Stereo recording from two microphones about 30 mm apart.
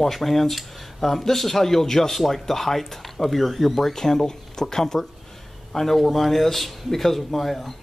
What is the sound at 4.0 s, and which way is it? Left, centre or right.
Speech, centre.